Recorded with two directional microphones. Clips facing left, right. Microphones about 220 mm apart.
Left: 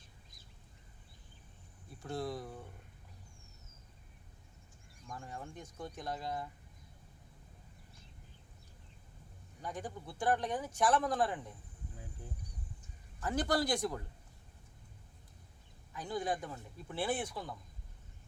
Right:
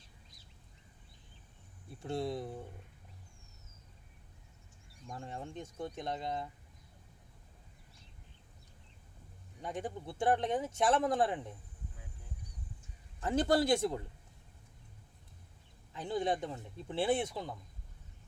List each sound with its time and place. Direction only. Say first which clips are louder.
2.0 s speech: right 3 dB; 25° right (ahead or behind)
5.0 s speech: right 3 dB; 20° right (ahead or behind)
9.6 s speech: right 3 dB; 25° right (ahead or behind)
13.1 s speech: right 4 dB; 25° right (ahead or behind)
15.9 s speech: right 3 dB; 25° right (ahead or behind)